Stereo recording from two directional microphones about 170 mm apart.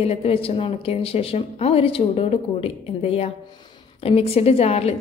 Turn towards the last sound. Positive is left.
turn(degrees=35)  # may be behind; listen again after turning